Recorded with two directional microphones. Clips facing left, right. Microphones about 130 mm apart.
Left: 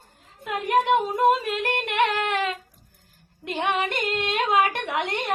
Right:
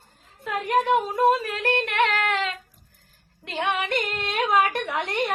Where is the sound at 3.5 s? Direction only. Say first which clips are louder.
Left 1 dB; 15° left (ahead or behind).